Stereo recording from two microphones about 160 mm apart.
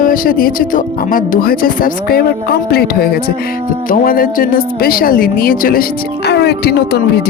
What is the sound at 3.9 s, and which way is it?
Speech, 60° left (ahead or behind).